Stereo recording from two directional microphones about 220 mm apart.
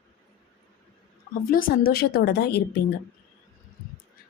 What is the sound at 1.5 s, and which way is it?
A woman's voice, 40° left (ahead or behind).